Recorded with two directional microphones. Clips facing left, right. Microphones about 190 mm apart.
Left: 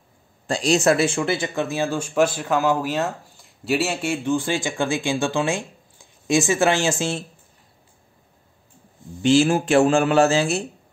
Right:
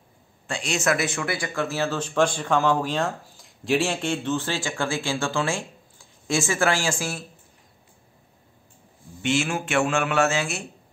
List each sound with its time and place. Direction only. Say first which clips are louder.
0.5 s speech: left 7 dB; 35° left (ahead or behind)
9.2 s speech: left 8 dB; 35° left (ahead or behind)